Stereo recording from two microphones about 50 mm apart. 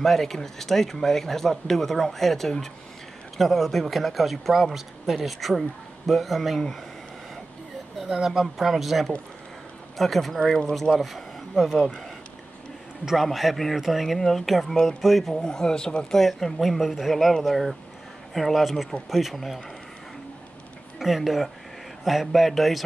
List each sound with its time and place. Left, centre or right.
0.0 s speech: centre
8.1 s speech: centre
11.7 s speech: centre
13.0 s speech: centre
15.4 s speech: centre
16.2 s speech: centre
21.0 s speech: centre